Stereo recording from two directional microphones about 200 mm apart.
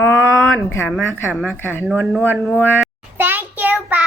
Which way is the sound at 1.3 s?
Centre (ahead or behind).